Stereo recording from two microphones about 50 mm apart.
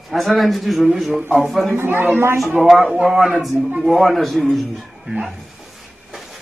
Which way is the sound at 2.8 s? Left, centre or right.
Centre.